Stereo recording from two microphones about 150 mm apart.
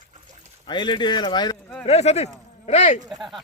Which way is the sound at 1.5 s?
10° left (ahead or behind).